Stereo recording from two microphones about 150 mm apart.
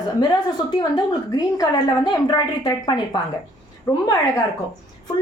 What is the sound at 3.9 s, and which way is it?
Speech, 15° left (ahead or behind).